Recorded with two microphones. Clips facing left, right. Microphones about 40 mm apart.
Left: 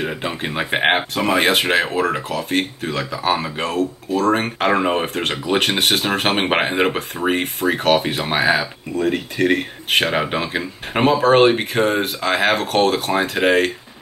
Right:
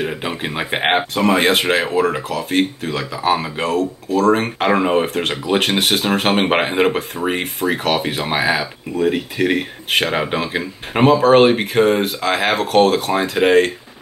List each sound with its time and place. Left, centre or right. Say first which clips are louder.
0.0 s speech: right 1 dB; centre